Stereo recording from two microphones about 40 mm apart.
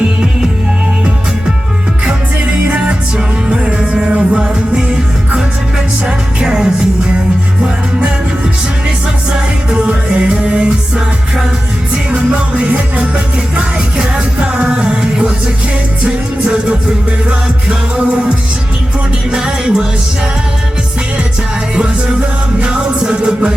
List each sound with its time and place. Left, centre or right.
2.6 s music: right
6.1 s music: centre
9.3 s music: right
12.1 s music: right
22.6 s music: right